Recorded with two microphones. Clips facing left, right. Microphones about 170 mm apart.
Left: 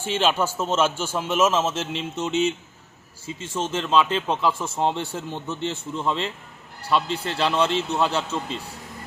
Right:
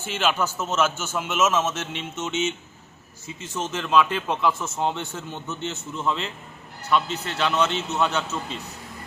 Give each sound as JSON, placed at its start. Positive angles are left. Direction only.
{"t": 0.1, "sound": "a man's voice", "side_deg": 30}